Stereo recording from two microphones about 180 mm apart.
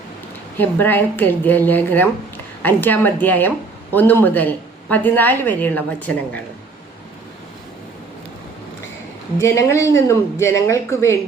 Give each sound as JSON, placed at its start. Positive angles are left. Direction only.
{"t": 0.6, "sound": "a woman's voice", "side_deg": 10}
{"t": 9.4, "sound": "a woman's voice", "side_deg": 15}